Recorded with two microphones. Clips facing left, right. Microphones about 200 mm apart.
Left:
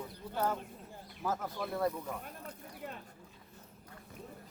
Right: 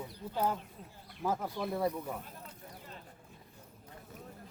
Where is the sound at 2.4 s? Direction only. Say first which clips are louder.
Left 5 dB; 60° left (ahead or behind).